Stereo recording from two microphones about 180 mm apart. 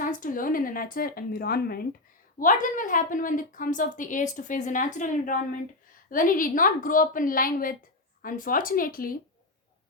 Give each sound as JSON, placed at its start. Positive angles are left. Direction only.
{"t": 0.0, "sound": "a woman's voice", "side_deg": 50}
{"t": 2.4, "sound": "a woman's voice", "side_deg": 45}